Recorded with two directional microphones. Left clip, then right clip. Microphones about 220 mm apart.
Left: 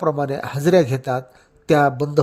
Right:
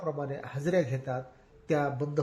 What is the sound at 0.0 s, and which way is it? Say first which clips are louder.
A man's voice: left 14 dB; 50° left (ahead or behind).